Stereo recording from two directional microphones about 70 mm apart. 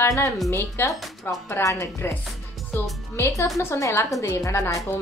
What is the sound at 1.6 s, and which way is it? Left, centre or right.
Speech, left.